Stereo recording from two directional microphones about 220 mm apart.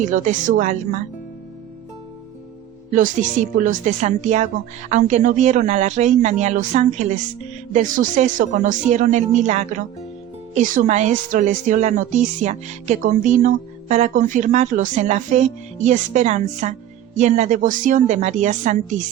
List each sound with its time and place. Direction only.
0.1 s a woman's voice: 35° right (ahead or behind)
2.9 s a woman's voice: 35° right (ahead or behind)